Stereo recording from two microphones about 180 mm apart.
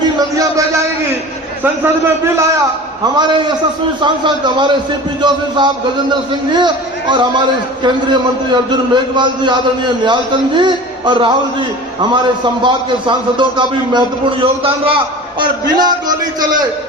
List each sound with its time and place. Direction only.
0.3 s a sound: 20° right (ahead or behind)
1.6 s a man's voice: 15° right (ahead or behind)
3.0 s a man's voice: 25° right (ahead or behind)
12.6 s a man's voice: 25° right (ahead or behind)